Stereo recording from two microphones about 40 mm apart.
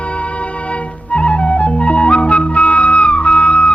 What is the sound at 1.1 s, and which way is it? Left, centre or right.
Music, left.